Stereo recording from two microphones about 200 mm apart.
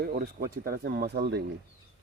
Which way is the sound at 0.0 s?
45° right (ahead or behind).